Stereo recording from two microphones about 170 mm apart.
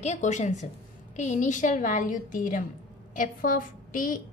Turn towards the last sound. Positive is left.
turn(degrees=55)  # may be behind; listen again after turning